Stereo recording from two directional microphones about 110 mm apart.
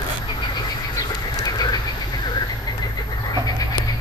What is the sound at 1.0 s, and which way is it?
Bird, 35° left (ahead or behind).